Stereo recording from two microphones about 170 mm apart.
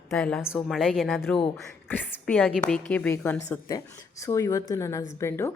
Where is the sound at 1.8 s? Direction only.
10° left (ahead or behind).